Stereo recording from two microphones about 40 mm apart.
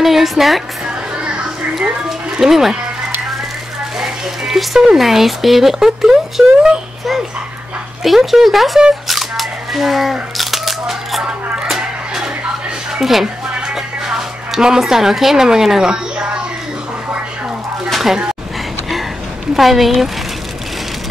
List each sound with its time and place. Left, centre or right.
0.0 s a woman's voice: centre
0.8 s music: right
2.4 s speech: centre
4.0 s speech: centre
8.0 s speech: centre
11.6 s a sound: centre
13.0 s speech: centre
15.9 s a sound: right
17.8 s a sound: centre
19.5 s speech: centre